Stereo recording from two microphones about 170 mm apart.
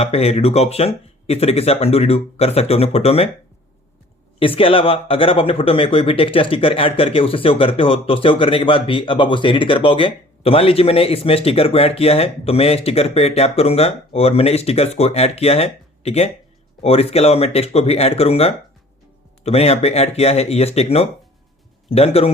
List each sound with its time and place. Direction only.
0.0 s speech: 35° left (ahead or behind)
4.4 s speech: 30° left (ahead or behind)